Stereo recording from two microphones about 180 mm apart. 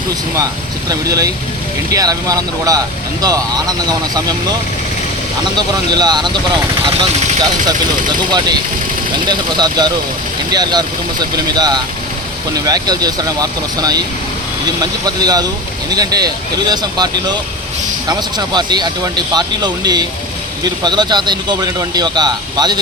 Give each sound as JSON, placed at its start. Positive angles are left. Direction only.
{"t": 0.9, "sound": "speech", "side_deg": -20}
{"t": 5.5, "sound": "speech", "side_deg": -25}
{"t": 8.3, "sound": "speech", "side_deg": -25}